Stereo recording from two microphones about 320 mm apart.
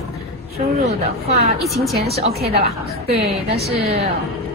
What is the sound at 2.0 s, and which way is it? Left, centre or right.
Speech, centre.